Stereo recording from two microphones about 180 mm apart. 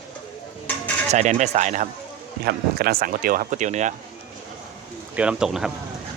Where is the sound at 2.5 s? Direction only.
55° right (ahead or behind).